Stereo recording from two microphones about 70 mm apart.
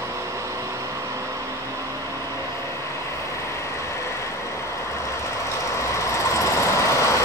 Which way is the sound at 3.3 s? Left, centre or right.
Left.